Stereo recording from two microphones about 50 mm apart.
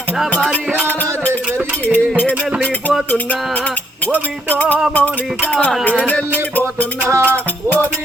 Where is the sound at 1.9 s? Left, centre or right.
Left.